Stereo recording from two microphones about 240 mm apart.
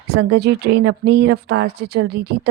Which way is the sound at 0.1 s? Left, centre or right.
Right.